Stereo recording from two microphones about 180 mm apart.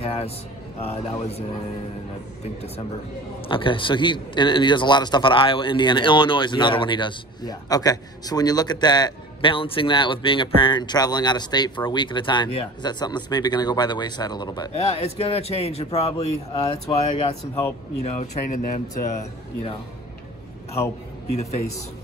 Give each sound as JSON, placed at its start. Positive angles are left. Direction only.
{"t": 0.0, "sound": "a sound", "side_deg": 35}
{"t": 3.4, "sound": "a man's voice", "side_deg": 30}
{"t": 14.7, "sound": "a man's voice", "side_deg": 35}
{"t": 21.4, "sound": "a man's voice", "side_deg": 40}